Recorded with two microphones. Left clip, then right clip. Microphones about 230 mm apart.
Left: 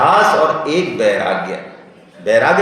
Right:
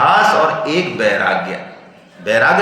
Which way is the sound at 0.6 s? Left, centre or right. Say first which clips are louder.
Left 1 dB; right.